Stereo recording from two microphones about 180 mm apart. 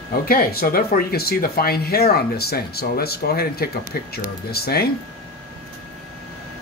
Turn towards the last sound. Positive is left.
turn(degrees=60)  # may be behind; listen again after turning